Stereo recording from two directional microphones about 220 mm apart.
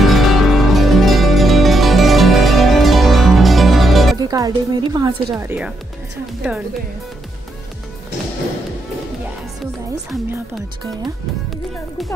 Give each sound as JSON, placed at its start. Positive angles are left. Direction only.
{"t": 0.0, "sound": "music", "side_deg": 0}
{"t": 4.2, "sound": "speech", "side_deg": -15}